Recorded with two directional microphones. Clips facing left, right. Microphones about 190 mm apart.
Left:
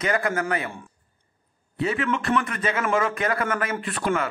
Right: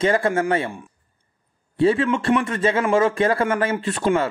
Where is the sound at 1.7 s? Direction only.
30° right (ahead or behind).